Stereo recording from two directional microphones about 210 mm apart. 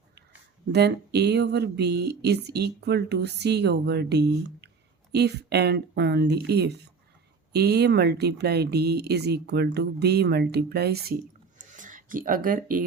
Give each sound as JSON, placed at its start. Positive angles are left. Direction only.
{"t": 0.7, "sound": "speech", "side_deg": -50}